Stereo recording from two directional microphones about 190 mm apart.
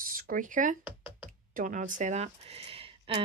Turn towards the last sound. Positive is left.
turn(degrees=-30)  # may be behind; listen again after turning